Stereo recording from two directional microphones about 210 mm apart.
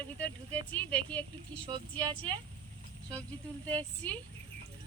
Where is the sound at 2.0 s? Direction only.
20° right (ahead or behind).